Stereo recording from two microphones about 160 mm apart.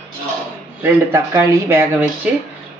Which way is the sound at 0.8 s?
15° right (ahead or behind).